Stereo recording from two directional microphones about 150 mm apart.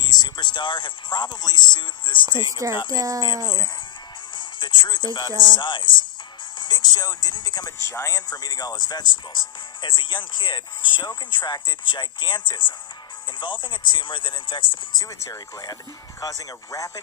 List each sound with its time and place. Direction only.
0.1 s speech: 30° left (ahead or behind)
2.9 s speech: 25° right (ahead or behind)
4.4 s speech: 30° left (ahead or behind)